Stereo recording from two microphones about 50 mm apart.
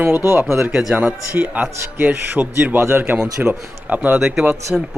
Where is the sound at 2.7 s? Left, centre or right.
Right.